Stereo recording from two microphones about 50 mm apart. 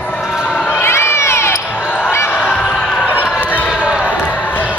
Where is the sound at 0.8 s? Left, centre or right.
Left.